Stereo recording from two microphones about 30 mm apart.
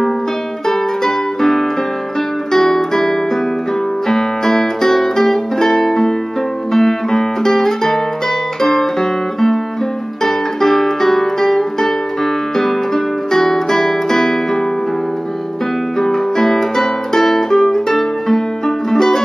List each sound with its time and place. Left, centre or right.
0.7 s music: centre
16.0 s music: centre